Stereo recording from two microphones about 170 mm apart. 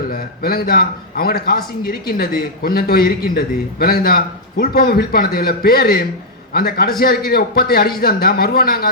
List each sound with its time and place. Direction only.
0.1 s a man's voice: 60° left (ahead or behind)